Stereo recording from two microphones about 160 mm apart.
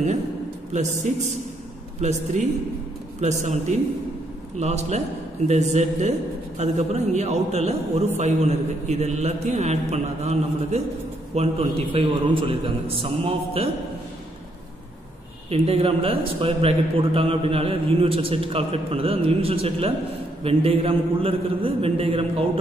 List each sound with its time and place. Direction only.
0.7 s a man's voice: 50° right (ahead or behind)
15.5 s a man's voice: 35° right (ahead or behind)